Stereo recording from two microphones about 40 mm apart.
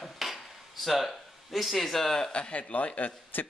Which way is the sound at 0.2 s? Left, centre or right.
Centre.